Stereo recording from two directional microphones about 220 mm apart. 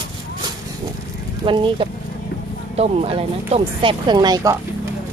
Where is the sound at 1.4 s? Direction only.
25° right (ahead or behind).